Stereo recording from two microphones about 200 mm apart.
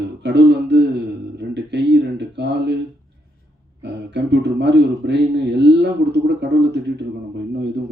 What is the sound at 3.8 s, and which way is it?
A man's voice, 60° right (ahead or behind).